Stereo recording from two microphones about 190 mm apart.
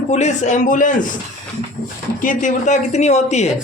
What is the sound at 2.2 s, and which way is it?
Speech, 45° left (ahead or behind).